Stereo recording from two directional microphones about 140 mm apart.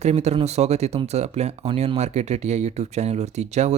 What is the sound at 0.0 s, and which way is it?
Speech, 50° right (ahead or behind).